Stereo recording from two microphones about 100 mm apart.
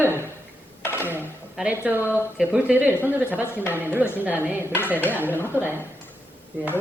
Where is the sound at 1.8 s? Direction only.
20° right (ahead or behind).